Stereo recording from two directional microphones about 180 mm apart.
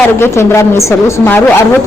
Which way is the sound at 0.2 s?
15° left (ahead or behind).